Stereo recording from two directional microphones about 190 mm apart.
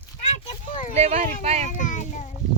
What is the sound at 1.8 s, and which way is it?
Speech, 40° left (ahead or behind).